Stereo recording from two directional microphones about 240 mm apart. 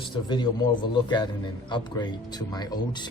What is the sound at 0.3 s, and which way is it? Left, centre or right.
Speech, centre.